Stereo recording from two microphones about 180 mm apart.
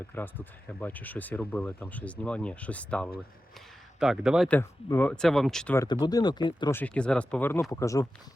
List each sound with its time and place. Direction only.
0.1 s speech: 10° left (ahead or behind)
4.0 s speech: 5° right (ahead or behind)
4.4 s speech: 10° left (ahead or behind)
5.7 s speech: 20° left (ahead or behind)
6.7 s speech: 5° left (ahead or behind)